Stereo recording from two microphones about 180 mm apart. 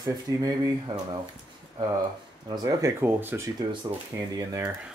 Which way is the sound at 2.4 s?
20° right (ahead or behind).